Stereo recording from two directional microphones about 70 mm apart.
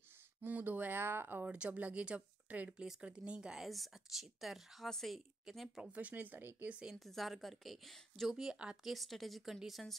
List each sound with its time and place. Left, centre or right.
0.5 s a sound: right
1.5 s speech: centre
5.9 s speech: right
7.0 s speech: centre
8.4 s speech: centre
8.9 s speech: centre